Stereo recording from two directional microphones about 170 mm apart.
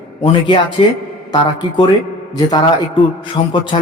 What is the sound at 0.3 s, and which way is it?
A man's voice, 30° left (ahead or behind).